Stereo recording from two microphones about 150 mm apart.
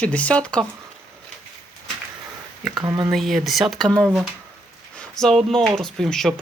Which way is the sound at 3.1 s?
Centre (ahead or behind).